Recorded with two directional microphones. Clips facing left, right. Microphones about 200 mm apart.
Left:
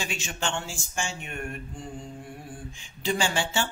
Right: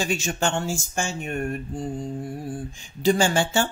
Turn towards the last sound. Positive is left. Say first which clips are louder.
# right 6 dB
turn(degrees=-45)  # may be behind; listen again after turning